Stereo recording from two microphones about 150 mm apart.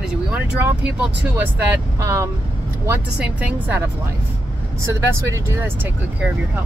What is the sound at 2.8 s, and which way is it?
Speech, 10° right (ahead or behind).